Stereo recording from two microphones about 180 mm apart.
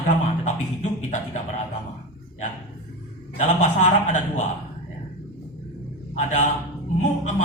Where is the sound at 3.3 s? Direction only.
40° left (ahead or behind).